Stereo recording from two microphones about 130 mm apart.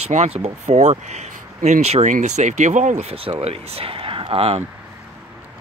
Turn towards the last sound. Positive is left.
turn(degrees=-50)  # may be behind; listen again after turning